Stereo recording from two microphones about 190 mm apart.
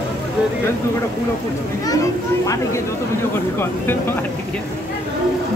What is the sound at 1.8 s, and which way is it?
A child's voice, 20° left (ahead or behind).